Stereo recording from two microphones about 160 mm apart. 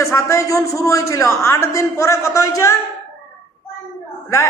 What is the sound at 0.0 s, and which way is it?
A man's voice, 15° left (ahead or behind).